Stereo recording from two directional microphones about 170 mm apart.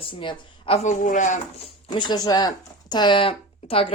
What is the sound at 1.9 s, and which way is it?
Speech, 25° left (ahead or behind).